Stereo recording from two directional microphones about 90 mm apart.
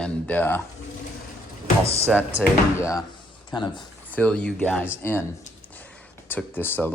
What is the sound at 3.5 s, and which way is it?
Speech, 55° left (ahead or behind).